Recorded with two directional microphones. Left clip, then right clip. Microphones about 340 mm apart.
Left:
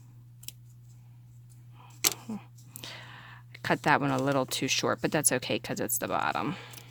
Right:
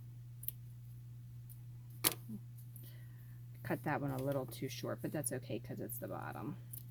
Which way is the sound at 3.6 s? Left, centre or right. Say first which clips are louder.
Left 14 dB; left.